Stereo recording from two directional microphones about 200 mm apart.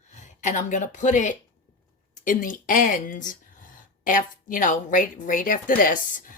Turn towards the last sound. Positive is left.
turn(degrees=45)  # may be behind; listen again after turning